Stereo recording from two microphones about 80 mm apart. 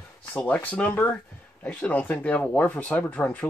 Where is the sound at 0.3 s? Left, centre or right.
Centre.